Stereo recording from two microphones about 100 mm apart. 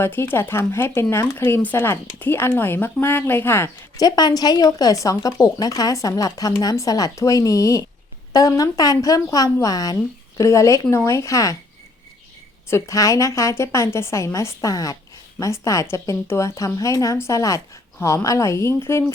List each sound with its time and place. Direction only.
0.0 s speech: 20° left (ahead or behind)
3.9 s a woman's voice: 40° left (ahead or behind)
12.7 s a woman's voice: 30° left (ahead or behind)